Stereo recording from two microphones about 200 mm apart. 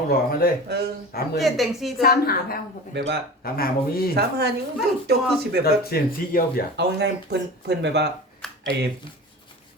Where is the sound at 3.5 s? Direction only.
50° left (ahead or behind).